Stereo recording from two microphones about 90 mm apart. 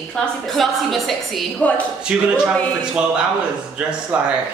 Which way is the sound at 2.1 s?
10° right (ahead or behind).